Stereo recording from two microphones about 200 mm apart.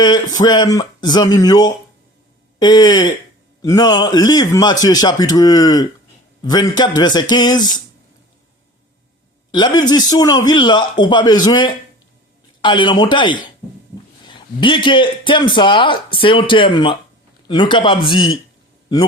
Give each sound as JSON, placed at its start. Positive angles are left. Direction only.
{"t": 0.0, "sound": "a man's voice", "side_deg": 20}
{"t": 9.5, "sound": "a man's voice", "side_deg": 20}